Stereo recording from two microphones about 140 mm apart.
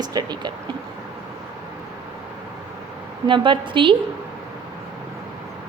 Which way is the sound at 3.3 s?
35° right (ahead or behind).